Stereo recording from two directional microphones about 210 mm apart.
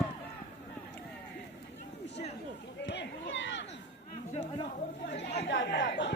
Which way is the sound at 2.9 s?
55° left (ahead or behind).